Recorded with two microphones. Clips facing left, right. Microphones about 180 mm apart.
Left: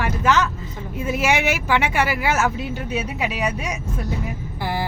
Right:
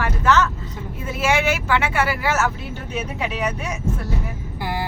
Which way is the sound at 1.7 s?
15° left (ahead or behind).